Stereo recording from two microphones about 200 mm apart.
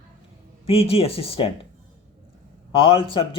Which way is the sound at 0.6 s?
30° left (ahead or behind).